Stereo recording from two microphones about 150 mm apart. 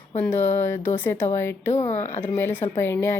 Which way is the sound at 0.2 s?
15° left (ahead or behind).